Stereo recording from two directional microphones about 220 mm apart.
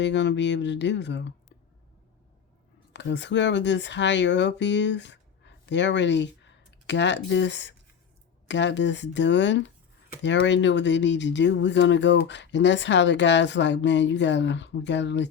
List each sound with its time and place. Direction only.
0.0 s speech: 55° left (ahead or behind)
2.9 s speech: 55° left (ahead or behind)